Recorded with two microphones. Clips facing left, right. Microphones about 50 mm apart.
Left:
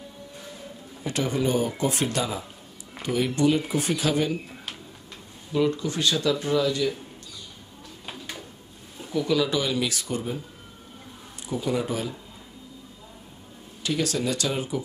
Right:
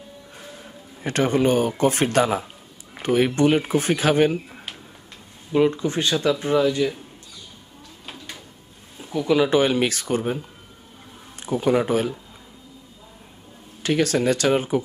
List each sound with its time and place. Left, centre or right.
1.0 s speech: right
5.5 s speech: right
9.1 s speech: right
13.8 s speech: right